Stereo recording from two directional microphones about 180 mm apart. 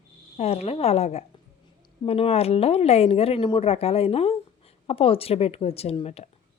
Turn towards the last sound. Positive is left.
turn(degrees=35)  # may be behind; listen again after turning